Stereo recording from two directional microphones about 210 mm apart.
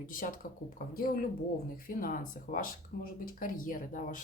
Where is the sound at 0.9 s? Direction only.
40° left (ahead or behind).